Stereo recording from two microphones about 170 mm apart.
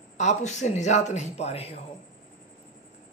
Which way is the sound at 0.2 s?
45° left (ahead or behind).